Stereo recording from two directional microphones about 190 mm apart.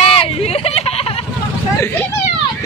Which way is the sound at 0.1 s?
30° left (ahead or behind).